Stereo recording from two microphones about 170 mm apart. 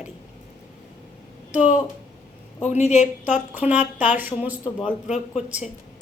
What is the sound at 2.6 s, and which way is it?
Speech, 40° left (ahead or behind).